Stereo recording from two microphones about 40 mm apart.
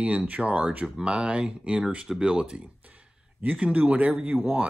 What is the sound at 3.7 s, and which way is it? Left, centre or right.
Speech, right.